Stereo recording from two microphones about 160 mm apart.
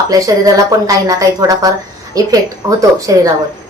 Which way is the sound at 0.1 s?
20° right (ahead or behind).